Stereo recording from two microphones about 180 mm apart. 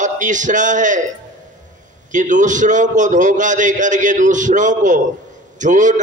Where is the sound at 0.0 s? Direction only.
45° right (ahead or behind).